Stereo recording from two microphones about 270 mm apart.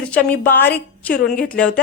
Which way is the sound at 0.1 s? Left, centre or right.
Centre.